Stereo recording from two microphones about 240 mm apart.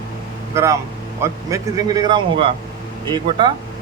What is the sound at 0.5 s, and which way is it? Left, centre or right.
Speech, centre.